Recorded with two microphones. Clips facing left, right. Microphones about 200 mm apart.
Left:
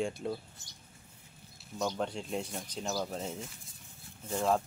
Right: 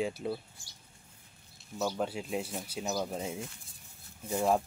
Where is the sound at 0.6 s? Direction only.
20° left (ahead or behind).